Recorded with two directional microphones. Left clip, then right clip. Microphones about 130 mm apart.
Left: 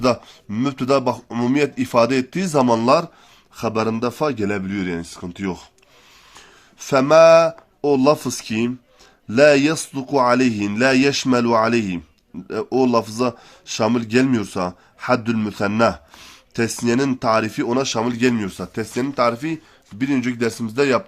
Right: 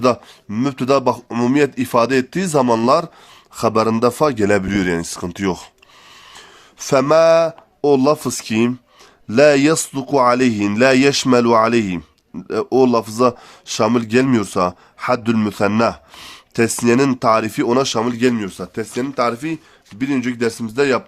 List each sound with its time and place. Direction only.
0.0 s a man's voice: 30° right (ahead or behind); by 5.6 s 55° right (ahead or behind)
6.7 s a man's voice: 40° right (ahead or behind)
18.0 s speech: 15° right (ahead or behind)